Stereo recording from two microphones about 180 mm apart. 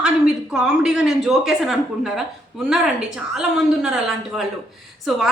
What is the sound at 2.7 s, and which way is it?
A woman's voice, 5° right (ahead or behind).